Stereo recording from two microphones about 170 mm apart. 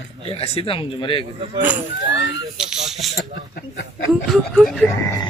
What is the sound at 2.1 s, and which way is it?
Speech, 90° left.